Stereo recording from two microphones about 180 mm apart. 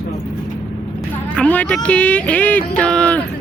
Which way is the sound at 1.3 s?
10° left (ahead or behind).